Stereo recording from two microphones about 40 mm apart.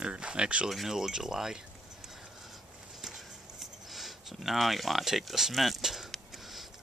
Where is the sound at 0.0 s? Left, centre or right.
Right.